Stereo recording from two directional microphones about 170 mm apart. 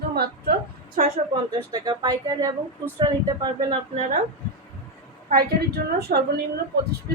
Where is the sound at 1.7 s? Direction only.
25° right (ahead or behind).